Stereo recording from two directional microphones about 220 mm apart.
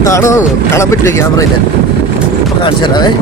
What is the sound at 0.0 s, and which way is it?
Speech, 15° left (ahead or behind).